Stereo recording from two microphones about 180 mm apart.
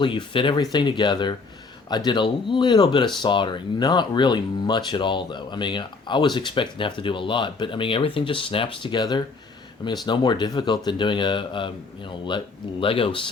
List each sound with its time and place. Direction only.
0.0 s speech: 30° left (ahead or behind)